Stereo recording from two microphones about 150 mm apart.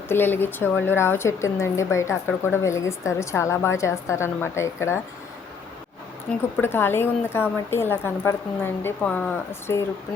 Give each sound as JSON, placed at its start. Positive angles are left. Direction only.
{"t": 0.1, "sound": "speech", "side_deg": 15}
{"t": 6.6, "sound": "speech", "side_deg": 15}